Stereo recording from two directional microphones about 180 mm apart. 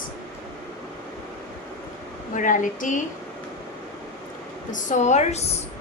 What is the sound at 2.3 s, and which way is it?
Speech, 45° left (ahead or behind).